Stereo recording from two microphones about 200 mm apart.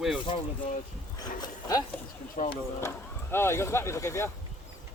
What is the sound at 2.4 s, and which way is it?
Speech, 35° left (ahead or behind).